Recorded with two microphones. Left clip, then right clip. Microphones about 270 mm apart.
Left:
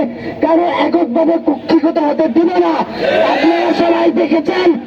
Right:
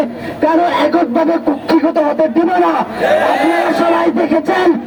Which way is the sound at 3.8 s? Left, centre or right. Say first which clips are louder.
Even; right.